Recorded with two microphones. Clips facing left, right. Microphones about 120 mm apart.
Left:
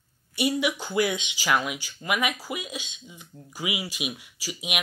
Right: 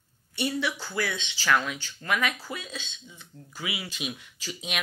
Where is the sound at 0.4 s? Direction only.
15° left (ahead or behind).